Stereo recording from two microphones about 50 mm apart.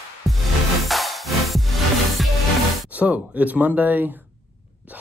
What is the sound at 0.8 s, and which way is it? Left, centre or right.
Music, centre.